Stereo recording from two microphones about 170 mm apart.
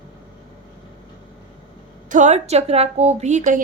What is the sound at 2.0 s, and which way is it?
A woman's voice, 45° right (ahead or behind).